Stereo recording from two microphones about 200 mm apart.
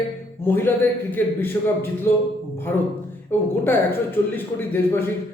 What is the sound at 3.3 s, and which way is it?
A man's voice, 10° left (ahead or behind).